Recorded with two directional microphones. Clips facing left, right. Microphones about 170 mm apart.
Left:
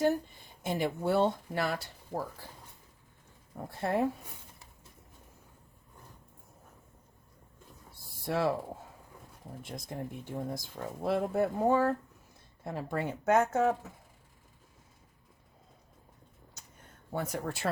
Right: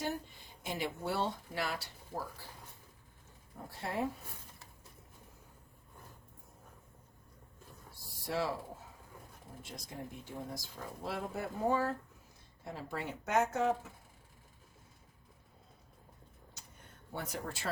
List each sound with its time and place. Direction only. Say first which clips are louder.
0.6 s speech: left 7 dB; 50° left (ahead or behind)
3.8 s speech: left 8 dB; 55° left (ahead or behind)
8.2 s speech: left 6 dB; 55° left (ahead or behind)
9.6 s speech: left 6 dB; 55° left (ahead or behind)
17.2 s speech: left 6 dB; 55° left (ahead or behind)